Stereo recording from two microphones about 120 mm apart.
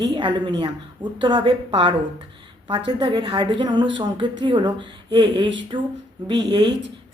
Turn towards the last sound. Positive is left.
turn(degrees=-40)  # may be behind; listen again after turning